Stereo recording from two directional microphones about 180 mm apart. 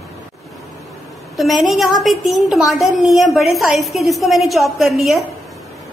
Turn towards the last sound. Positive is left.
turn(degrees=0)  # may be behind; listen again after turning